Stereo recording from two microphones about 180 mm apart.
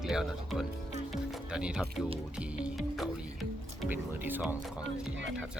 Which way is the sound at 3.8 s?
10° right (ahead or behind).